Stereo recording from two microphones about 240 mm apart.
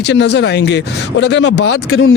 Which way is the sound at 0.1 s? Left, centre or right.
Left.